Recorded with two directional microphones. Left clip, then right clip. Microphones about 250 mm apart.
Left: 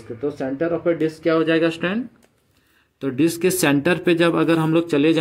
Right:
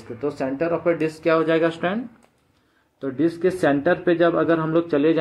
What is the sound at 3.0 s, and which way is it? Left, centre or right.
Speech, left.